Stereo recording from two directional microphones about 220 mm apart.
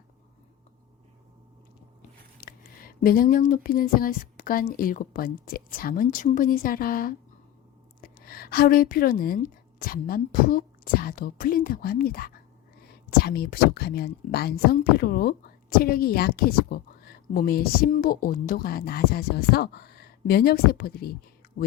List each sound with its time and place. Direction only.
2.0 s a woman's voice: 40° left (ahead or behind)